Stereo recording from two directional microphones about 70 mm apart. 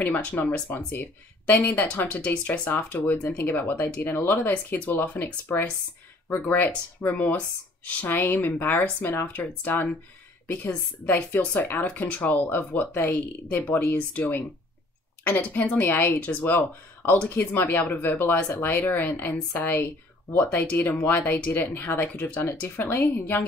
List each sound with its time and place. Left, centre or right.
0.0 s speech: left